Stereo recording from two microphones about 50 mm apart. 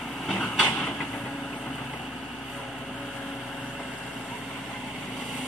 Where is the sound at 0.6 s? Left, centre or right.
Left.